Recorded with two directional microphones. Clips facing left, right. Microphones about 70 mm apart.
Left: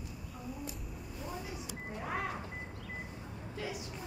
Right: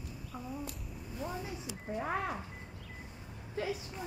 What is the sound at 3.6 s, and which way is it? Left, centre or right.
Vehicle, right.